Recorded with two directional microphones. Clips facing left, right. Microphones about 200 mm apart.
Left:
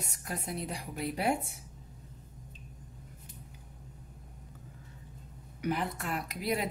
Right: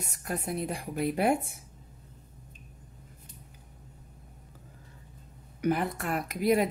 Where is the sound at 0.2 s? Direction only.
50° right (ahead or behind).